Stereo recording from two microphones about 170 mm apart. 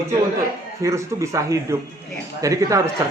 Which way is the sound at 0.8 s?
15° right (ahead or behind).